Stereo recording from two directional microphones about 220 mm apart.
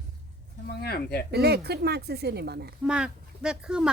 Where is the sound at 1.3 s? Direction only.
45° right (ahead or behind).